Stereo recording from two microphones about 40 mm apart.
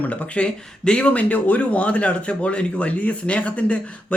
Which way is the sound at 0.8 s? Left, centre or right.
Left.